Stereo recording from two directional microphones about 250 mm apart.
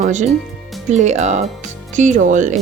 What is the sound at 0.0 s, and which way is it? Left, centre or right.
Speech, right.